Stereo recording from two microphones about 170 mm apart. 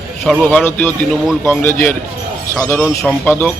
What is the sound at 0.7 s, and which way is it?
Speech, 10° left (ahead or behind).